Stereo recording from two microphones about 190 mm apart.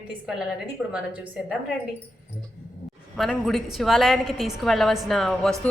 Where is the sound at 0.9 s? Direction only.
5° right (ahead or behind).